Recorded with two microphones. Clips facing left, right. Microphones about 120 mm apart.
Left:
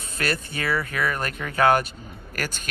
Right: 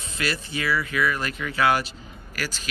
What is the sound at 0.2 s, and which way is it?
Speech, 50° left (ahead or behind).